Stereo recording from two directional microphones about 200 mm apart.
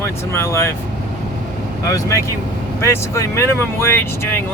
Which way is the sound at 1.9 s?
15° left (ahead or behind).